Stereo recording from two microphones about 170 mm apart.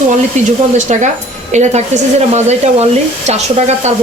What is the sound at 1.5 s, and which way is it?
Speech, 40° right (ahead or behind).